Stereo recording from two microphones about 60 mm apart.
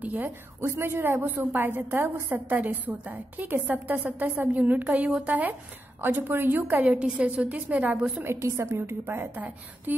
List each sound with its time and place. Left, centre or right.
0.0 s a woman's voice: right
0.6 s a woman's voice: right
6.7 s a woman's voice: right
8.3 s a woman's voice: right